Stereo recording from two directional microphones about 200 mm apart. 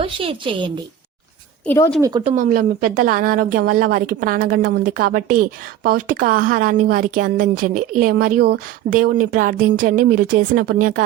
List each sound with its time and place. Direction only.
0.0 s a woman's voice: 25° right (ahead or behind)
1.6 s a woman's voice: 10° left (ahead or behind)
2.0 s a woman's voice: 20° right (ahead or behind)
2.2 s a woman's voice: 40° right (ahead or behind)